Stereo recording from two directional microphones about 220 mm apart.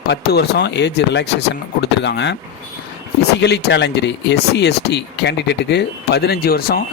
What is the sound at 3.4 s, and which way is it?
Speech, 50° left (ahead or behind).